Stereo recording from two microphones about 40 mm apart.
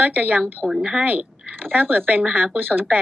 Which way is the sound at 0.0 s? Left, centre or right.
Right.